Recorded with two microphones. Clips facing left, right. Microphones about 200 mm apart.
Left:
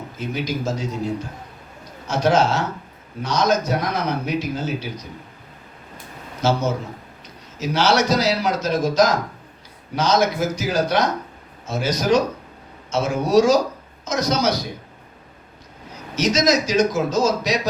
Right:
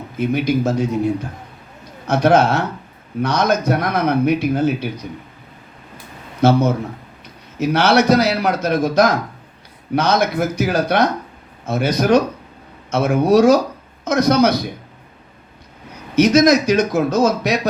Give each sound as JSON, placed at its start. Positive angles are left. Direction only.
{"t": 0.2, "sound": "speech", "side_deg": -60}
{"t": 6.4, "sound": "speech", "side_deg": -60}
{"t": 15.9, "sound": "speech", "side_deg": -60}